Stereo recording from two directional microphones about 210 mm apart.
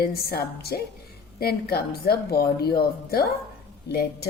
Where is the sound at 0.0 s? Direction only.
45° left (ahead or behind).